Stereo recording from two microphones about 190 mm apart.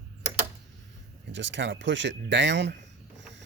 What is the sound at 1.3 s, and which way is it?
Speech, 70° right (ahead or behind).